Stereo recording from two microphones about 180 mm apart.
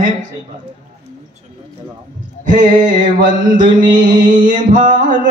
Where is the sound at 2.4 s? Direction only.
45° right (ahead or behind).